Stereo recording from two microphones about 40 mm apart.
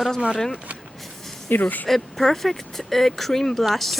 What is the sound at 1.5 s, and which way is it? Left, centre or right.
Speech, left.